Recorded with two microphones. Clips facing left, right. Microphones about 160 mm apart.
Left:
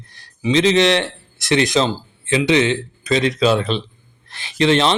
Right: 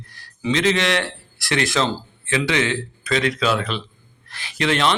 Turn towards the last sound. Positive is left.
turn(degrees=25)  # may be behind; listen again after turning